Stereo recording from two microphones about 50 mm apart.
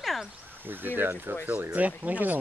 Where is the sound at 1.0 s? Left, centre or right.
Right.